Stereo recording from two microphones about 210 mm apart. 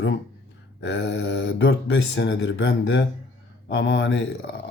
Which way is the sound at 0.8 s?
55° left (ahead or behind).